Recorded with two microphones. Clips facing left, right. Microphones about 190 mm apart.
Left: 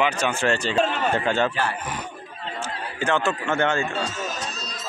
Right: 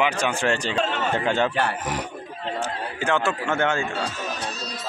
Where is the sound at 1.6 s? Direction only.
80° right.